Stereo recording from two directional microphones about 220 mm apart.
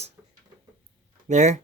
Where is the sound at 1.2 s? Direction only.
35° right (ahead or behind).